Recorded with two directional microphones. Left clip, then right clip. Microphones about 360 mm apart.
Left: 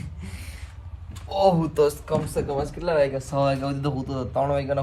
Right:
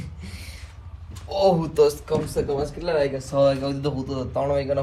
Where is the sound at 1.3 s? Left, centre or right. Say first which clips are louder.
Even; centre.